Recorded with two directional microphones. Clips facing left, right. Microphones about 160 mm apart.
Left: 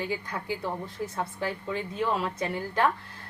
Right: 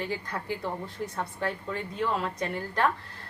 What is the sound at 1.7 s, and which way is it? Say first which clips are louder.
Speech: left 3 dB; 20° left (ahead or behind).